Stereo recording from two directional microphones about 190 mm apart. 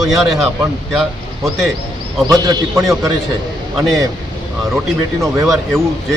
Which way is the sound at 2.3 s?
20° right (ahead or behind).